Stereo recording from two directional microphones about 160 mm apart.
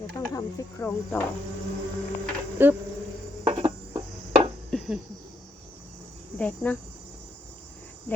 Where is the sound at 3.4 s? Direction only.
25° right (ahead or behind).